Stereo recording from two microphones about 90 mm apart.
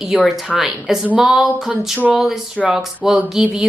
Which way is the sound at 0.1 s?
5° right (ahead or behind).